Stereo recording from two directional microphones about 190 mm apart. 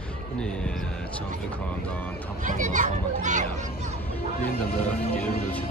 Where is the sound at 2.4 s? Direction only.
45° right (ahead or behind).